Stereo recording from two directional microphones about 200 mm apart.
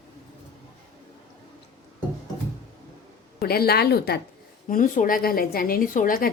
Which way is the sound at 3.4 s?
50° left (ahead or behind).